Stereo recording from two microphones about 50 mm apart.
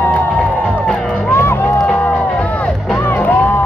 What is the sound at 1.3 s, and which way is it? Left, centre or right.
Music, left.